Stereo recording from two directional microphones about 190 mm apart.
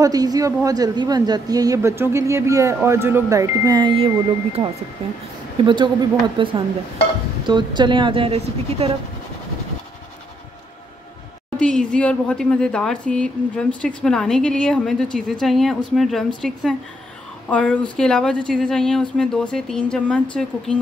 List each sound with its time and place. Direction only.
0.0 s a woman's voice: 20° right (ahead or behind)
5.6 s a woman's voice: 25° right (ahead or behind)
11.5 s speech: 5° left (ahead or behind)